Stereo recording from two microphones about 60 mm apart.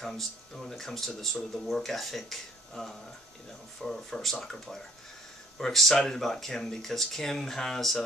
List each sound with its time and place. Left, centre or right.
0.0 s speech: centre